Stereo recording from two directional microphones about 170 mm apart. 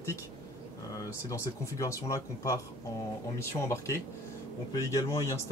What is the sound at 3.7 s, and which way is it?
Speech, 15° left (ahead or behind).